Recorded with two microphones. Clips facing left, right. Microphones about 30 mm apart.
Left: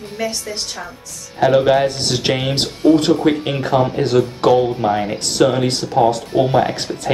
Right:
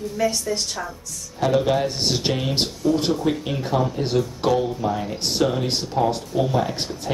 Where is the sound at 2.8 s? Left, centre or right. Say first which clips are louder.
Left 9 dB; left.